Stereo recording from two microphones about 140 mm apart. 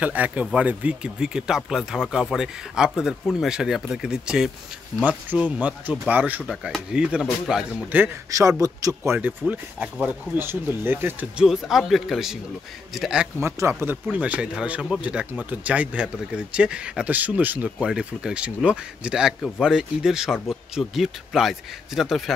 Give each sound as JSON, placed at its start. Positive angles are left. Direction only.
{"t": 0.0, "sound": "speech", "side_deg": -10}
{"t": 8.3, "sound": "speech", "side_deg": -25}
{"t": 13.4, "sound": "speech", "side_deg": -20}